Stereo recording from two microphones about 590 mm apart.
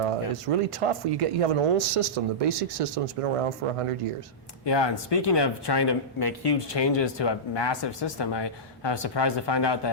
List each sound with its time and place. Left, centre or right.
0.0 s speech: right
4.6 s speech: left